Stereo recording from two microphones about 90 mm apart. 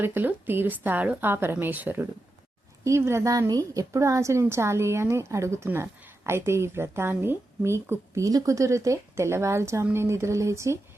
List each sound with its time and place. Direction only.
0.0 s a woman's voice: 25° right (ahead or behind)
2.8 s a woman's voice: 30° right (ahead or behind)